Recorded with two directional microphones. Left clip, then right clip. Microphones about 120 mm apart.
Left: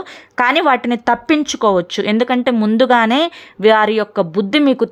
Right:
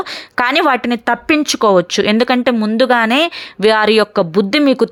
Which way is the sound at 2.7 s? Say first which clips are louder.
Left 1 dB; centre (ahead or behind).